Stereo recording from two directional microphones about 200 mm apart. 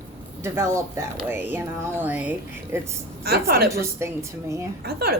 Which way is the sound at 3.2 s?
50° right (ahead or behind).